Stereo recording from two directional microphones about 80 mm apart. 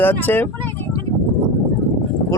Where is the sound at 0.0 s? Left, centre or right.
Left.